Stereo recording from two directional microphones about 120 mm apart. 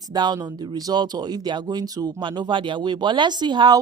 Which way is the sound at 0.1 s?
35° right (ahead or behind).